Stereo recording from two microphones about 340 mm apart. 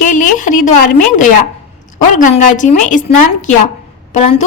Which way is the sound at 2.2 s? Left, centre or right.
Left.